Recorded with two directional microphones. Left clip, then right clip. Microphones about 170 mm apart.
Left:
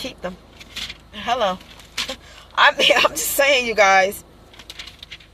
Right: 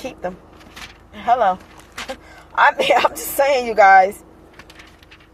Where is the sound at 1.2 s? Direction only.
30° left (ahead or behind).